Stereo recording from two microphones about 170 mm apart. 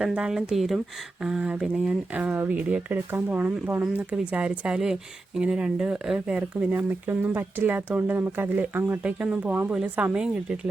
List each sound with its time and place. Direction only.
0.0 s speech: 5° right (ahead or behind)